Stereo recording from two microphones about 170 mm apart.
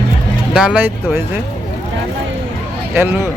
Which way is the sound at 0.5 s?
5° right (ahead or behind).